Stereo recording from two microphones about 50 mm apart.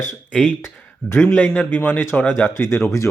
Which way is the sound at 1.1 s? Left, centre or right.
Left.